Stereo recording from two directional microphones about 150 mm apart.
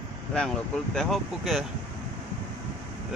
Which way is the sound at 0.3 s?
5° left (ahead or behind).